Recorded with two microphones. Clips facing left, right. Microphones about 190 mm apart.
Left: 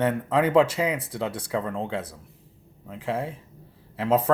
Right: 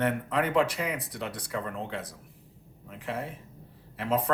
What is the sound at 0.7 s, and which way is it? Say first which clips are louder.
Speech: left 6 dB; 25° left (ahead or behind).